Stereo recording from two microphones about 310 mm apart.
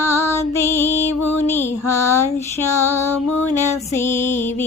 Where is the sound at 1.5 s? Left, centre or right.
Centre.